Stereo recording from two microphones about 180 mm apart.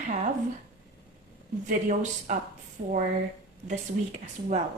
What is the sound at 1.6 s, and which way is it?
Speech, 45° right (ahead or behind).